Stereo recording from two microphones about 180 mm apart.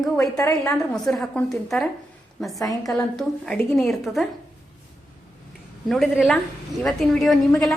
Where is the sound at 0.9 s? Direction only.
5° left (ahead or behind).